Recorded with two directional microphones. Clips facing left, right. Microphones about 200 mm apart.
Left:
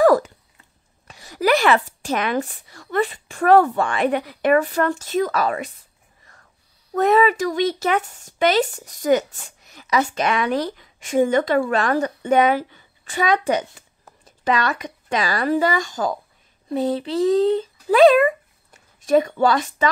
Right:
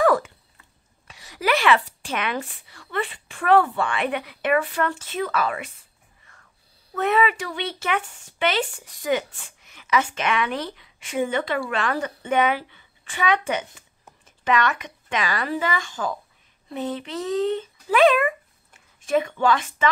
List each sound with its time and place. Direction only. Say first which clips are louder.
0.0 s a sound: left 5 dB; 40° left (ahead or behind)
1.0 s speech: left 5 dB; 45° left (ahead or behind)
6.9 s speech: left 5 dB; 40° left (ahead or behind)